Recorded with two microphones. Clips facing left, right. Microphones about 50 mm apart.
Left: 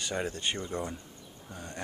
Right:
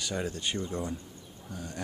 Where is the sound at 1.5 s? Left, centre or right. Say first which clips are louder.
Right 2 dB; centre.